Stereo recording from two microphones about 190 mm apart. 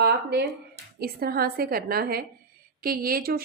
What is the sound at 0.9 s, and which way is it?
A woman's voice, 55° right (ahead or behind).